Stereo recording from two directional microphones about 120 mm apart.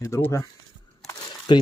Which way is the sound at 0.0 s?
25° left (ahead or behind).